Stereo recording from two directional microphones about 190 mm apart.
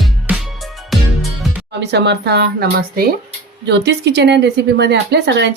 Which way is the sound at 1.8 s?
60° right (ahead or behind).